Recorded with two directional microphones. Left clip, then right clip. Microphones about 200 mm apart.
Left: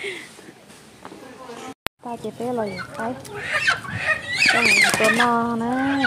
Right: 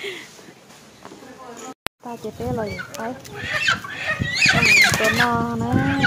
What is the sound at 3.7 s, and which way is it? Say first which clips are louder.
Speech: left 2 dB; 25° left (ahead or behind).